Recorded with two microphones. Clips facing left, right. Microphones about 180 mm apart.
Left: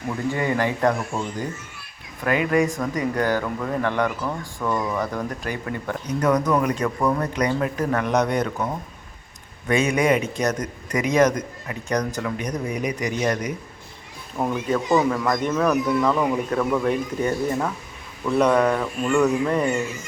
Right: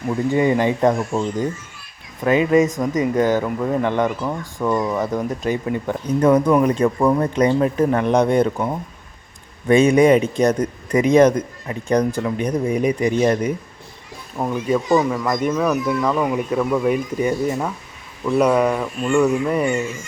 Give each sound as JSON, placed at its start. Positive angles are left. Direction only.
{"t": 0.3, "sound": "speech", "side_deg": -20}
{"t": 9.6, "sound": "a man's voice", "side_deg": -30}
{"t": 14.3, "sound": "speech", "side_deg": -10}